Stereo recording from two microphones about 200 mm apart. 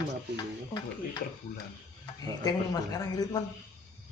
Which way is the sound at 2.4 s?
20° left (ahead or behind).